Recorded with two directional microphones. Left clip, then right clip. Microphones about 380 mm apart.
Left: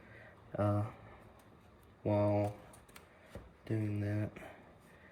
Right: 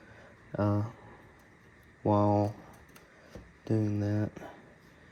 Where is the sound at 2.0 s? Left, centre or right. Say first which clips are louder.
Right 6 dB; centre.